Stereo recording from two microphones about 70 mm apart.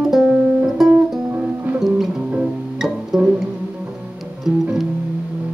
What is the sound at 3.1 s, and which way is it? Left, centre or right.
Music, centre.